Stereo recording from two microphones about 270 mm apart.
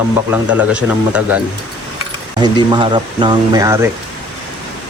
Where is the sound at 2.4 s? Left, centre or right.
Centre.